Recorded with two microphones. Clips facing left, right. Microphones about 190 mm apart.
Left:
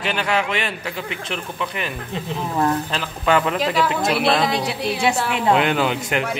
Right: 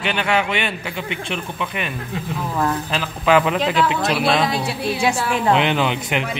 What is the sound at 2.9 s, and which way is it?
Speech, 5° right (ahead or behind).